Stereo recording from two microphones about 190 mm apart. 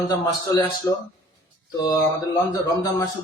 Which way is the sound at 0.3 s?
15° left (ahead or behind).